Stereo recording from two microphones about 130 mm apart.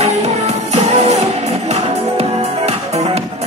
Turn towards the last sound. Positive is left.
turn(degrees=-50)  # may be behind; listen again after turning